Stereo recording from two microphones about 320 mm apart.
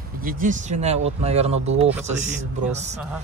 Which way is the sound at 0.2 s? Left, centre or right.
Right.